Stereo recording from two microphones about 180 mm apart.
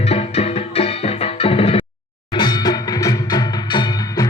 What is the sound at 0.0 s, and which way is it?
Music, 35° left (ahead or behind).